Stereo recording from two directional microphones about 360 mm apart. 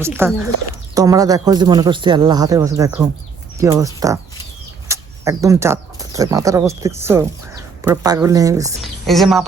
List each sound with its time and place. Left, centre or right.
0.0 s speech: centre